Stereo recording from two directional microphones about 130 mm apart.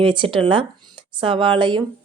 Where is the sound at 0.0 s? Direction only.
40° right (ahead or behind).